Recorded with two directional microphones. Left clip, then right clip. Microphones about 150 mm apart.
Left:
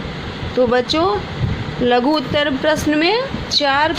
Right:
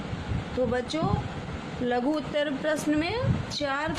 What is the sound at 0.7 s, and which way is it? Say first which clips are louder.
Speech: left 13 dB; 50° left (ahead or behind).